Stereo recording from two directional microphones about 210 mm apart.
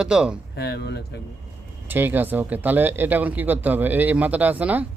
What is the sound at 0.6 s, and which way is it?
Speech, 50° left (ahead or behind).